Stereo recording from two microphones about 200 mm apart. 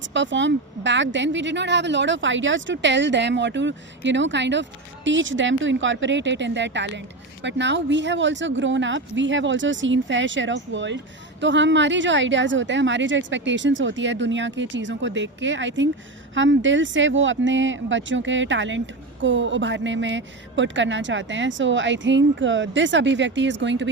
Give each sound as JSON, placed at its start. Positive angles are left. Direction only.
{"t": 0.0, "sound": "speech", "side_deg": -65}